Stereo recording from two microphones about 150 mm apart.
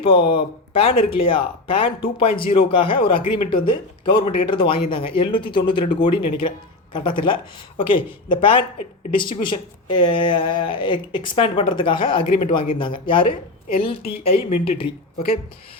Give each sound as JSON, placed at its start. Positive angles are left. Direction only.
{"t": 0.0, "sound": "speech", "side_deg": 35}
{"t": 7.8, "sound": "speech", "side_deg": 35}